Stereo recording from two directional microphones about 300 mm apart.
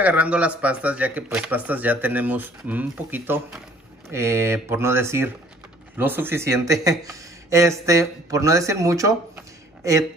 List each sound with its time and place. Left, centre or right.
0.0 s speech: centre